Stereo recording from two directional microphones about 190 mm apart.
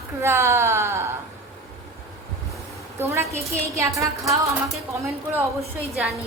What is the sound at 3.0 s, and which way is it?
Speech, 15° right (ahead or behind).